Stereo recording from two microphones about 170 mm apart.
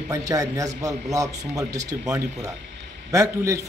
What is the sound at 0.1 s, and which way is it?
Speech, 20° right (ahead or behind).